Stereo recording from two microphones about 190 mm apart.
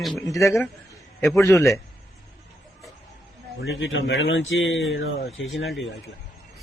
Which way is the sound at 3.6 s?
80° left.